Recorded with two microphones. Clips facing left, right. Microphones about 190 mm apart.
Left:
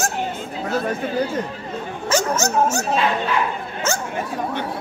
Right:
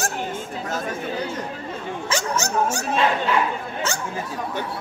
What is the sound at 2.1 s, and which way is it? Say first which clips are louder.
Speech: left 5 dB; 45° left (ahead or behind).